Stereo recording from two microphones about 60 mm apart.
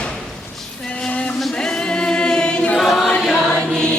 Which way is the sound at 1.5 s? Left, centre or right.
Centre.